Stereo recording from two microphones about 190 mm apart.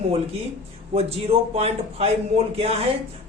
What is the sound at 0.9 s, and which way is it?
A man's voice, 30° right (ahead or behind).